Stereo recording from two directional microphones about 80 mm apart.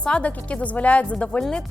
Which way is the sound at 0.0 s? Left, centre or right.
Centre.